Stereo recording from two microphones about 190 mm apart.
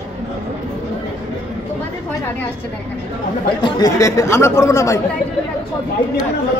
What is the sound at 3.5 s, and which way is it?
Speech, 25° left (ahead or behind).